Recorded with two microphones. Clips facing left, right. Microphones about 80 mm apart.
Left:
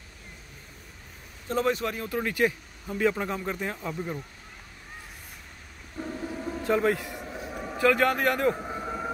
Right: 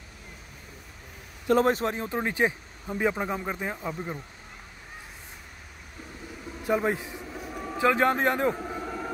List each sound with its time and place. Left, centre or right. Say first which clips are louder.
1.5 s speech: right 4 dB; right; by 4.2 s centre
6.7 s speech: left 1 dB; centre
7.2 s vehicle: left 1 dB; centre
7.7 s speech: even; right
8.5 s vehicle: even; centre